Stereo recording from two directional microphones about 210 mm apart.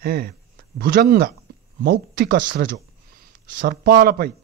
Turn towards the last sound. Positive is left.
turn(degrees=-45)  # may be behind; listen again after turning